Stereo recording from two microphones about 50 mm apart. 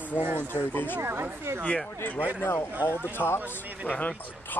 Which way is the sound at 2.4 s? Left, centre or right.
Left.